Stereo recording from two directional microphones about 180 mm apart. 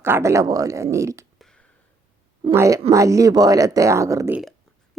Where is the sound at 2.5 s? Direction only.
15° right (ahead or behind).